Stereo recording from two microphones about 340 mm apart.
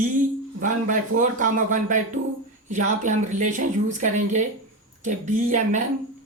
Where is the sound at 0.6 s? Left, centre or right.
Right.